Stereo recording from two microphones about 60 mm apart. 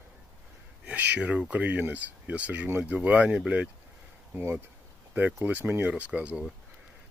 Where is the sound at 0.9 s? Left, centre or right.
Right.